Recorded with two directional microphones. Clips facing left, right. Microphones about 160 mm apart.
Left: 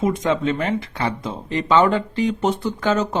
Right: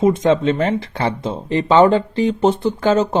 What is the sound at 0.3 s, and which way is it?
Speech, 30° right (ahead or behind).